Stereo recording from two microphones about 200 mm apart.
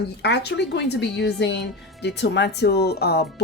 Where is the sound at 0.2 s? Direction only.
55° left (ahead or behind).